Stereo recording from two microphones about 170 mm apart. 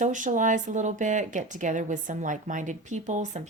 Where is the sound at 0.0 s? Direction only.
50° right (ahead or behind).